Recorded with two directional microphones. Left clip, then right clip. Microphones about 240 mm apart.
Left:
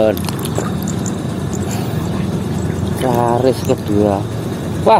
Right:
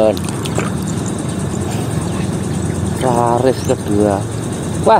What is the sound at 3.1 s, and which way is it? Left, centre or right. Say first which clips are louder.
Speech: even; left.